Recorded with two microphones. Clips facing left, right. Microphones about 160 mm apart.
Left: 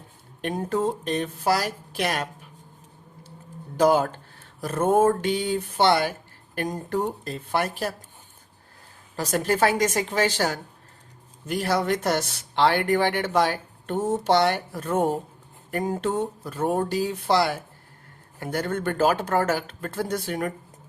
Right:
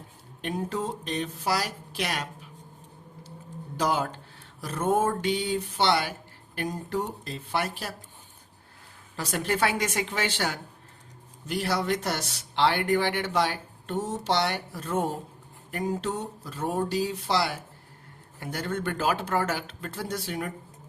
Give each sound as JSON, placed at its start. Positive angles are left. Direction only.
{"t": 0.4, "sound": "speech", "side_deg": 50}
{"t": 3.8, "sound": "speech", "side_deg": 50}
{"t": 9.1, "sound": "a woman's voice", "side_deg": 45}